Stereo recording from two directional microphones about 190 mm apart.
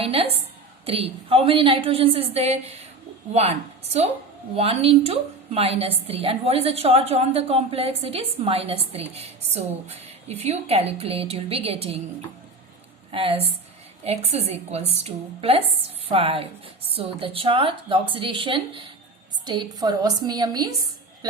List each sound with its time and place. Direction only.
0.0 s a sound: 30° right (ahead or behind)
0.9 s a woman's voice: 30° right (ahead or behind)
4.5 s a woman's voice: 30° right (ahead or behind)
13.1 s a woman's voice: 30° right (ahead or behind)